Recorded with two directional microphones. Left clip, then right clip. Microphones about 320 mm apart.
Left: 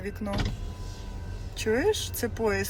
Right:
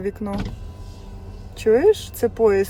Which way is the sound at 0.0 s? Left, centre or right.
Right.